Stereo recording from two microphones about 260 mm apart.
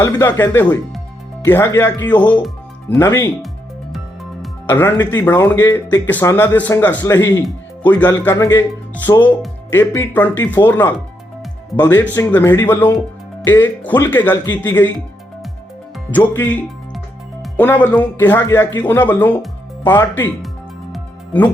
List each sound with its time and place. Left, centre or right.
0.0 s speech: centre
4.6 s speech: centre
16.1 s speech: centre
20.9 s music: centre